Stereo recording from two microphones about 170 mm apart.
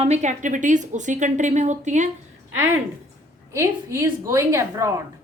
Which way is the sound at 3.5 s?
15° right (ahead or behind).